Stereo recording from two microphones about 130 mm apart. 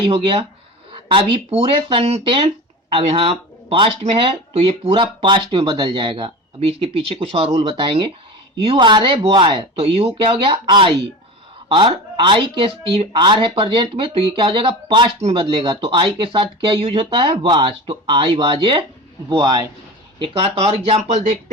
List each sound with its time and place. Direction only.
0.1 s speech: 50° right (ahead or behind)
2.0 s speech: 60° right (ahead or behind)
2.9 s speech: 45° right (ahead or behind)
9.7 s speech: 50° right (ahead or behind)
20.6 s speech: 55° right (ahead or behind)